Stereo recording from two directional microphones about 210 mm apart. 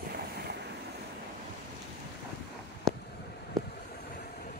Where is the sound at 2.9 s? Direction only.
Centre (ahead or behind).